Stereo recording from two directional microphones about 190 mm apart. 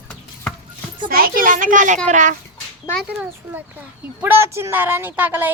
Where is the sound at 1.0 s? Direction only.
50° right (ahead or behind).